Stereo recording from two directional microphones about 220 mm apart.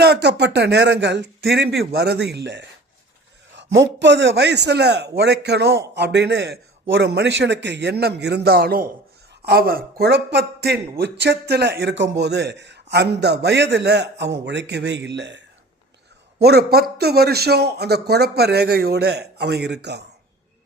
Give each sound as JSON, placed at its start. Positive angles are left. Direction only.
{"t": 0.0, "sound": "a man's voice", "side_deg": -50}